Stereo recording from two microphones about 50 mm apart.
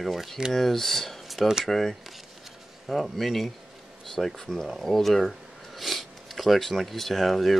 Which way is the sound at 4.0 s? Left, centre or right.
Centre.